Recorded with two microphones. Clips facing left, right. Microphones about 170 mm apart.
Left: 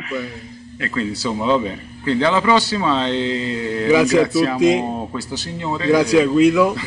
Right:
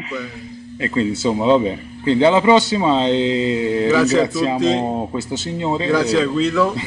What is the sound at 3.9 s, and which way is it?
Speech, 10° left (ahead or behind).